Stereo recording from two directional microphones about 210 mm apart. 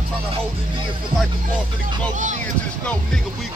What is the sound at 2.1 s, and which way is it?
Speech, 35° right (ahead or behind).